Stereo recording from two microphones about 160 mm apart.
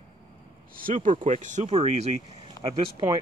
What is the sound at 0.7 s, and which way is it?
Speech, 60° right (ahead or behind).